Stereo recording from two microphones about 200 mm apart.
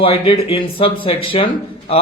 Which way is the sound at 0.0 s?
25° left (ahead or behind).